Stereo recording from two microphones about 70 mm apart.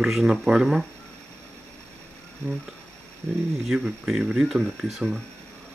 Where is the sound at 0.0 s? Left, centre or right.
Centre.